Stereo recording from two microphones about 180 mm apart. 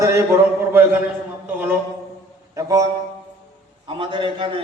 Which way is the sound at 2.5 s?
20° right (ahead or behind).